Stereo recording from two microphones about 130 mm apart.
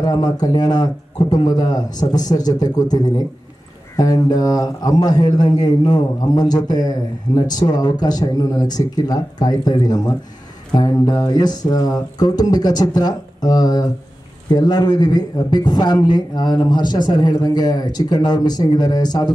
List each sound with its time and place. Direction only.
0.0 s a man's voice: 30° left (ahead or behind)